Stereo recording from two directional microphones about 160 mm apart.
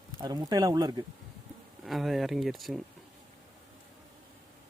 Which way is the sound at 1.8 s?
Centre (ahead or behind).